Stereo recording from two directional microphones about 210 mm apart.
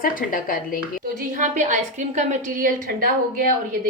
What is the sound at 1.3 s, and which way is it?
A woman's voice, 35° right (ahead or behind).